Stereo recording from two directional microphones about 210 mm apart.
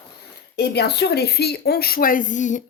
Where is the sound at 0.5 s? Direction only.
50° left (ahead or behind).